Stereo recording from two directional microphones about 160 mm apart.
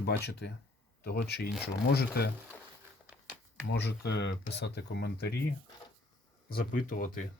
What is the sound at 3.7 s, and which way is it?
Speech, 90° left.